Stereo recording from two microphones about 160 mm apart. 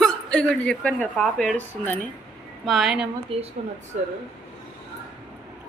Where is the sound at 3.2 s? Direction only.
35° right (ahead or behind).